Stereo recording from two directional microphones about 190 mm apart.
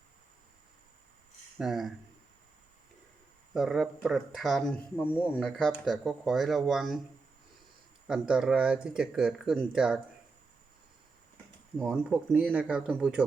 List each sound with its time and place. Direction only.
1.5 s speech: centre (ahead or behind)
3.5 s speech: centre (ahead or behind)
8.0 s speech: 5° right (ahead or behind)
11.9 s speech: 5° right (ahead or behind)